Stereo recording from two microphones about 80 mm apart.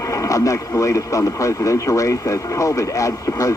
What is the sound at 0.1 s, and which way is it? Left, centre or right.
Speech, left.